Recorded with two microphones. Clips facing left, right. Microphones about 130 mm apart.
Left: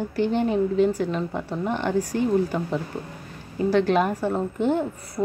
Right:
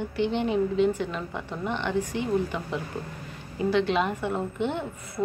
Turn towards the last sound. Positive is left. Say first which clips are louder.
# left 7 dB
turn(degrees=40)  # may be behind; listen again after turning